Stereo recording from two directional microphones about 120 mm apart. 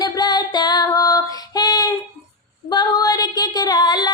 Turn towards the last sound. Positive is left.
turn(degrees=35)  # may be behind; listen again after turning